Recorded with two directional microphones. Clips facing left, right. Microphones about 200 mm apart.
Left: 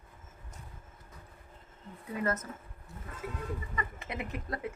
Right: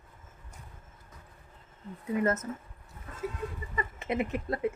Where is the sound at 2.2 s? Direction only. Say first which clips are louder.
Right 4 dB; 25° right (ahead or behind).